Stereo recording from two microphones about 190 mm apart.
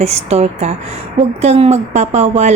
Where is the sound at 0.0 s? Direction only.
35° right (ahead or behind).